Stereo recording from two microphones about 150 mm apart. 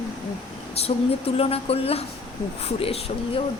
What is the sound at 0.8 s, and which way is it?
Speech, 45° left (ahead or behind).